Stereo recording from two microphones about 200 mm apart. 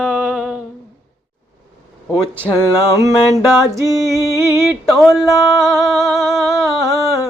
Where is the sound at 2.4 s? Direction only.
20° left (ahead or behind).